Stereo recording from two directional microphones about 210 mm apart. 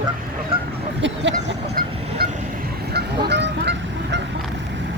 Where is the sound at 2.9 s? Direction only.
50° right (ahead or behind).